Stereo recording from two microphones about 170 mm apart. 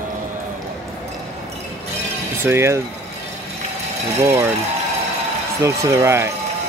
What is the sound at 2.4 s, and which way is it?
Speech, 15° right (ahead or behind).